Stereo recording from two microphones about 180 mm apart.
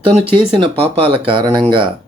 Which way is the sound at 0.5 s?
30° right (ahead or behind).